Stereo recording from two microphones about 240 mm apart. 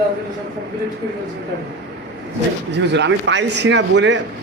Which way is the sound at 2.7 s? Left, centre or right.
Right.